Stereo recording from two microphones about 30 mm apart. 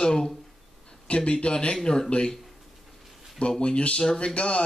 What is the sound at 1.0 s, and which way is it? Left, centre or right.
Speech, left.